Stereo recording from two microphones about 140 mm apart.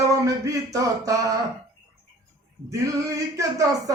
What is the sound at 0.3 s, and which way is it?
Speech, 25° right (ahead or behind).